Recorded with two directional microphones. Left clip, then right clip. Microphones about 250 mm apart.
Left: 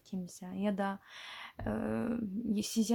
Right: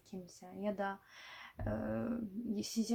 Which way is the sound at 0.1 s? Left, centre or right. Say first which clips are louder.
Left 5 dB; left.